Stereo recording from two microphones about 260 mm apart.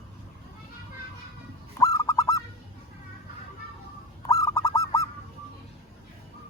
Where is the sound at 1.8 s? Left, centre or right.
Centre.